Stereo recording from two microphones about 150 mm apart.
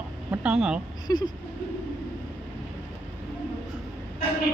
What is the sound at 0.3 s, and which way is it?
Speech, 5° right (ahead or behind).